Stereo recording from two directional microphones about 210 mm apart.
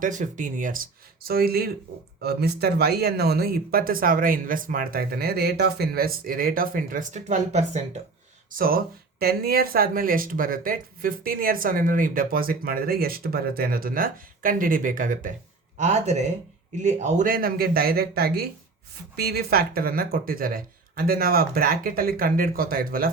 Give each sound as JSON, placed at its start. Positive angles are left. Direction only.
{"t": 0.0, "sound": "speech", "side_deg": -35}